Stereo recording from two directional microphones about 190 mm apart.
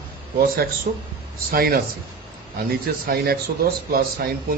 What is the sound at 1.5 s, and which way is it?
Speech, 50° right (ahead or behind).